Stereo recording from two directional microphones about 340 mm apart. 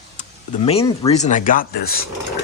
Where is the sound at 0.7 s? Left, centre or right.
Centre.